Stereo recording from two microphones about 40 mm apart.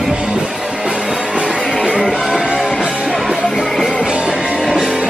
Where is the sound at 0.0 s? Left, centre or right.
Centre.